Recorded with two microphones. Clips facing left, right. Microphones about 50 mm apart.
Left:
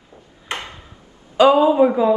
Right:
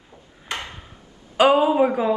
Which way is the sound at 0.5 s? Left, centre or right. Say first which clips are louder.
Left 2 dB; left.